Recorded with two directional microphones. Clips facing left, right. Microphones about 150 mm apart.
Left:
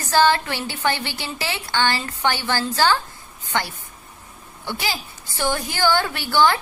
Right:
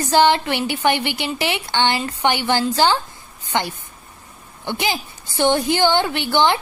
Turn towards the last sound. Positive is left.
turn(degrees=-20)  # may be behind; listen again after turning